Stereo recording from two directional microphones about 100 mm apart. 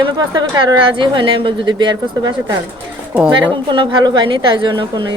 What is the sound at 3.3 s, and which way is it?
A woman's voice, 55° right (ahead or behind).